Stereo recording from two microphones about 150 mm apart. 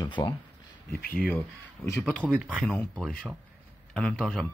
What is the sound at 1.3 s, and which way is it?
Speech, 15° left (ahead or behind).